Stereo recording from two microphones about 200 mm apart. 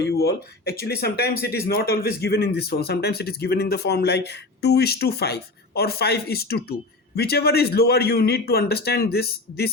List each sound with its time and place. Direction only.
0.0 s speech: 55° left (ahead or behind)